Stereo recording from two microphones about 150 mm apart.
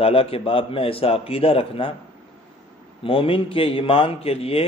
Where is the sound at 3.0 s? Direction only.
35° left (ahead or behind).